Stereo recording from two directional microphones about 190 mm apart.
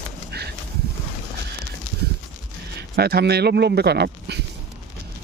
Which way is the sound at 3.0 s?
55° right (ahead or behind).